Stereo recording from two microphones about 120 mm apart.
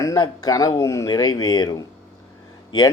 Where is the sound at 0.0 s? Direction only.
30° left (ahead or behind).